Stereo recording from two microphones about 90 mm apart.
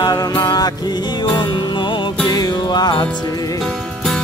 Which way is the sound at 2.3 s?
50° left (ahead or behind).